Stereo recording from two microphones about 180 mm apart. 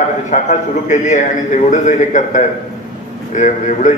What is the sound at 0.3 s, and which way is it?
A man's voice, 40° left (ahead or behind).